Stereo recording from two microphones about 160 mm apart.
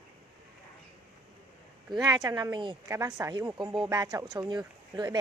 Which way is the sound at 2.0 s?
20° right (ahead or behind).